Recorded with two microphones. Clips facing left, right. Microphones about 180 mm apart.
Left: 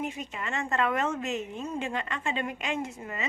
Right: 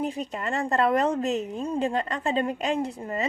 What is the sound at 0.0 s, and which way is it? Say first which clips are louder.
A woman's voice: right 5 dB; 35° right (ahead or behind).